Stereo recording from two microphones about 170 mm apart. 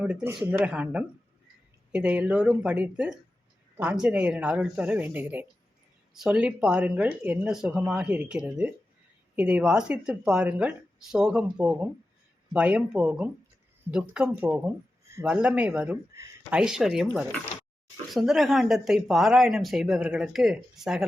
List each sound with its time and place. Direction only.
0.0 s speech: 5° right (ahead or behind)
18.1 s speech: centre (ahead or behind)